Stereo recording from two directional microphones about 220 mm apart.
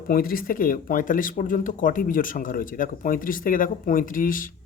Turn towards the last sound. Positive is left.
turn(degrees=40)  # may be behind; listen again after turning